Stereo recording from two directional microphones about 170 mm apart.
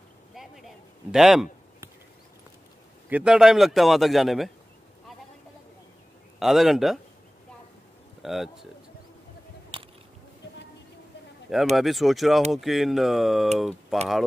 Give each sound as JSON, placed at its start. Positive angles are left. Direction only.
{"t": 0.3, "sound": "a man's voice", "side_deg": 0}
{"t": 3.1, "sound": "a man's voice", "side_deg": -5}
{"t": 6.4, "sound": "a man's voice", "side_deg": 0}
{"t": 8.2, "sound": "speech", "side_deg": 0}
{"t": 9.7, "sound": "biting", "side_deg": -30}
{"t": 11.7, "sound": "a man's voice", "side_deg": 0}